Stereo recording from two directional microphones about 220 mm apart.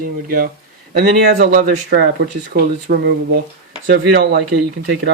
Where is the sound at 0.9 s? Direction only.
45° right (ahead or behind).